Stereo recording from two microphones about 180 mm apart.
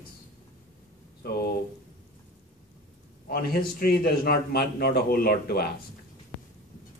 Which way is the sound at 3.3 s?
60° left (ahead or behind).